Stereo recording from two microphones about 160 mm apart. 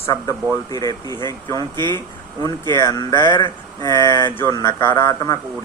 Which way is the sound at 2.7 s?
20° left (ahead or behind).